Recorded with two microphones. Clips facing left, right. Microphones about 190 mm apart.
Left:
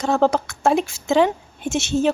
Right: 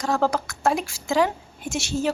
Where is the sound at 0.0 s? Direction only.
25° left (ahead or behind).